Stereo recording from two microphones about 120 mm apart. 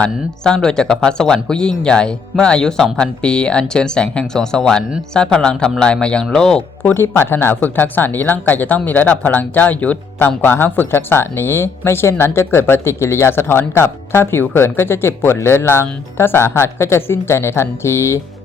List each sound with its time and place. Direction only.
0.0 s speech: 5° left (ahead or behind)
6.9 s speech: 20° left (ahead or behind)